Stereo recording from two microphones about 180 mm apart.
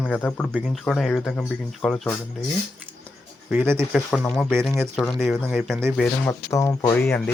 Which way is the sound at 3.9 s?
5° left (ahead or behind).